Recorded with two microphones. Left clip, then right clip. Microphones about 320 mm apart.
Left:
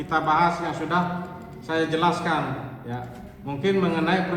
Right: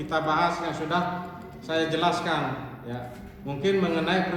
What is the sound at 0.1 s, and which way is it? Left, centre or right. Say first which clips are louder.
A man's voice: left 4 dB; left.